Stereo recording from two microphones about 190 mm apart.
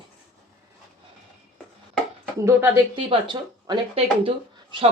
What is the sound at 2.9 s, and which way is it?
Speech, 25° right (ahead or behind).